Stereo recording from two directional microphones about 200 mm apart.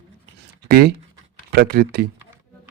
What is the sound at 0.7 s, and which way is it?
Speech, 50° right (ahead or behind).